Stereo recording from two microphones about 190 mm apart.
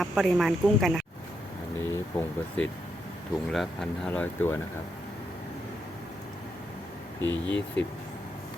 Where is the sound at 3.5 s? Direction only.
Centre (ahead or behind).